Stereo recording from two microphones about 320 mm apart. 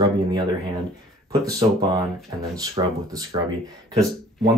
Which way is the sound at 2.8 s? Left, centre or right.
Centre.